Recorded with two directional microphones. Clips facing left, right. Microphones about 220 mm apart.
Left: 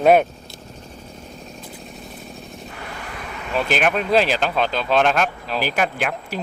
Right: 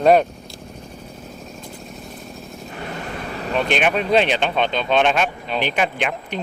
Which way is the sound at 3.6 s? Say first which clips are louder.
Even; centre (ahead or behind).